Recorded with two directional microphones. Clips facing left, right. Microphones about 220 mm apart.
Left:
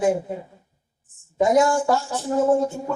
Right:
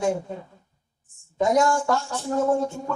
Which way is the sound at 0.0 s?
15° left (ahead or behind).